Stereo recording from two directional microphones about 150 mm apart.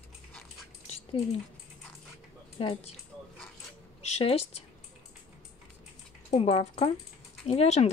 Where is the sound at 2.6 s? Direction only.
40° left (ahead or behind).